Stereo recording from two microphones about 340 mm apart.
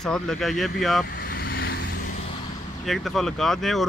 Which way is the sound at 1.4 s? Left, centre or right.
Left.